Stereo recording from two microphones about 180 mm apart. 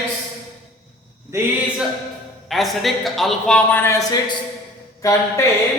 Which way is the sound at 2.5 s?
Centre (ahead or behind).